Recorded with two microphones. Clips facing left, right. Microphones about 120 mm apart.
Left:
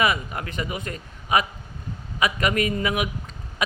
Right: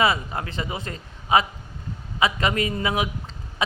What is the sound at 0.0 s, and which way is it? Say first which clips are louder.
A woman's voice: right 1 dB; 30° right (ahead or behind).